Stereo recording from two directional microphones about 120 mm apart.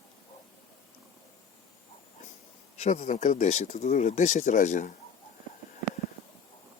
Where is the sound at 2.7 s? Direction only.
75° left (ahead or behind); by 4.9 s 90° left.